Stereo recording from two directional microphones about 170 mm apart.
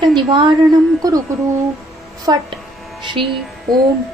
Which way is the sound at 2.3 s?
20° right (ahead or behind).